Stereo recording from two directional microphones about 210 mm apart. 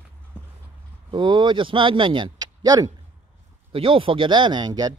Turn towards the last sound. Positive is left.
turn(degrees=-20)  # may be behind; listen again after turning